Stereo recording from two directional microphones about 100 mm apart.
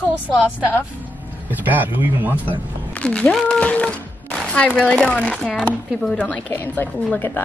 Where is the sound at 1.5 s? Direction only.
15° right (ahead or behind).